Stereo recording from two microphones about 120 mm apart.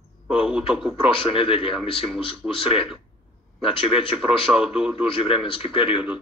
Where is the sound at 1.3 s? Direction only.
50° left (ahead or behind).